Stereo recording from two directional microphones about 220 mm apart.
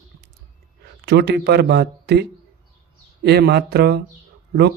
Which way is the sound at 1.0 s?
50° right (ahead or behind).